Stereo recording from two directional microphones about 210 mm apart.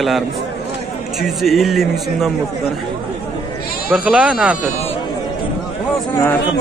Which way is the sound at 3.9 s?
5° right (ahead or behind).